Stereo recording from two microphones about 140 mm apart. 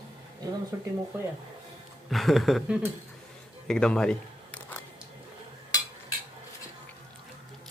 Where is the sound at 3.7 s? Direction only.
5° left (ahead or behind).